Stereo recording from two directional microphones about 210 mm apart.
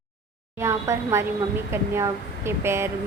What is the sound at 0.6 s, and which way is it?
A woman's voice, 15° right (ahead or behind).